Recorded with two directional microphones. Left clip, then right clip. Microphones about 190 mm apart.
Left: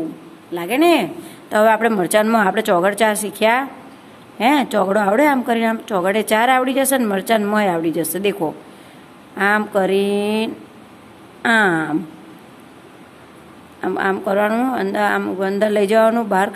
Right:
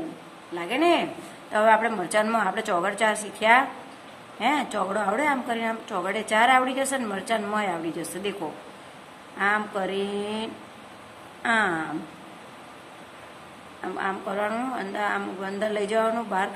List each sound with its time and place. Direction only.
0.6 s a woman's voice: 50° left (ahead or behind)
9.4 s a woman's voice: 50° left (ahead or behind)
13.7 s a woman's voice: 45° left (ahead or behind)